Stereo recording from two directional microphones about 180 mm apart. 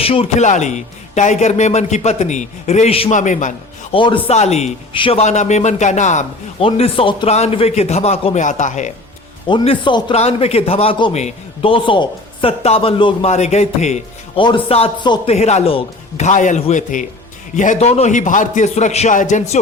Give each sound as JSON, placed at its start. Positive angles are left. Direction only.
{"t": 0.0, "sound": "a man's voice", "side_deg": 30}
{"t": 3.9, "sound": "speech", "side_deg": 30}
{"t": 9.5, "sound": "speech", "side_deg": 25}